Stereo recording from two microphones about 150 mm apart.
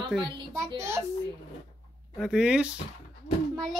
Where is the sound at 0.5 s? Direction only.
20° right (ahead or behind).